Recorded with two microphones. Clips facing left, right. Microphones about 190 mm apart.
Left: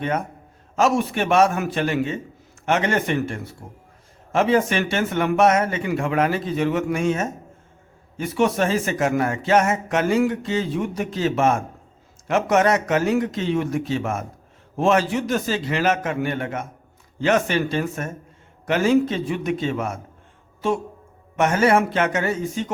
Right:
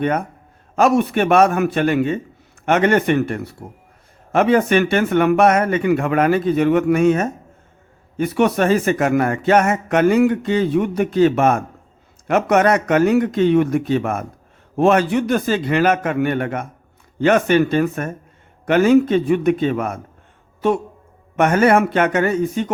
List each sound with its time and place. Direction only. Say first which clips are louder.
0.8 s speech: right 5 dB; 60° right (ahead or behind)
21.3 s speech: right 4 dB; 55° right (ahead or behind)